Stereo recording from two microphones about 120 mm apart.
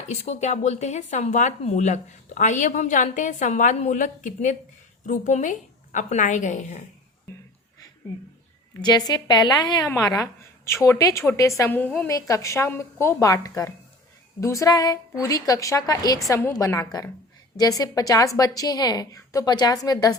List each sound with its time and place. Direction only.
0.1 s a woman's voice: 65° left (ahead or behind); by 6.8 s 90° left
8.8 s a woman's voice: 35° left (ahead or behind); by 12.0 s 15° left (ahead or behind)
12.0 s a woman's voice: 25° left (ahead or behind)